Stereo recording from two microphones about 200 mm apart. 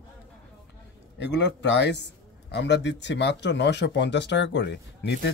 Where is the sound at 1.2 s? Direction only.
60° left (ahead or behind).